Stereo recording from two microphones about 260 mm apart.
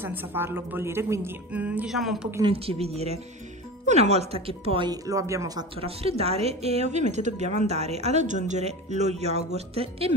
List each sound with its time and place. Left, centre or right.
0.0 s a woman's voice: centre
2.4 s a woman's voice: right